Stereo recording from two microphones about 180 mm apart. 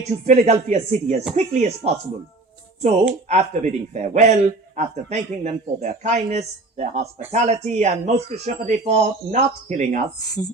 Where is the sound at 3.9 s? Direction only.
40° right (ahead or behind).